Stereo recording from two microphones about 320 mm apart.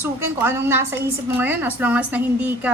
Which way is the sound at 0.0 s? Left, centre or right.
Centre.